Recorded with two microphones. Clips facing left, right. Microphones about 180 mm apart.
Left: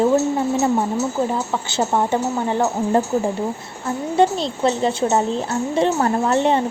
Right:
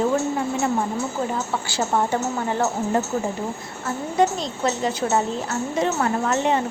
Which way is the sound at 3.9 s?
30° left (ahead or behind).